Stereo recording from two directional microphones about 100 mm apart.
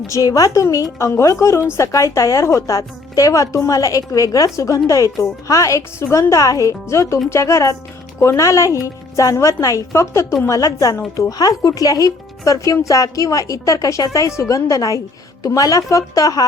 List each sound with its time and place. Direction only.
0.1 s speech: 35° left (ahead or behind)